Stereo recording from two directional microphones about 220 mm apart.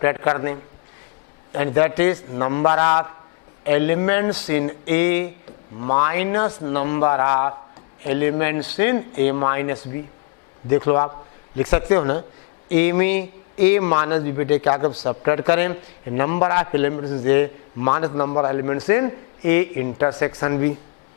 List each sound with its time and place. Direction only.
0.0 s a man's voice: 15° left (ahead or behind)